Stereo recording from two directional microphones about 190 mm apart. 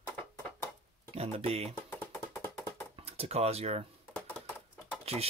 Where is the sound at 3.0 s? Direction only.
35° right (ahead or behind).